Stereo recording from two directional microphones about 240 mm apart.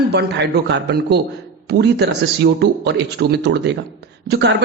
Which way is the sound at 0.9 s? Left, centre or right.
Right.